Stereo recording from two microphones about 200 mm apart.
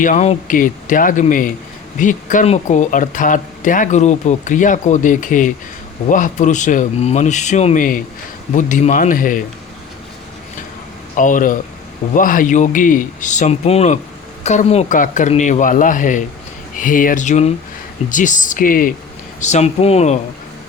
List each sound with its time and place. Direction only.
0.0 s speech: 35° left (ahead or behind)
11.2 s speech: 40° left (ahead or behind)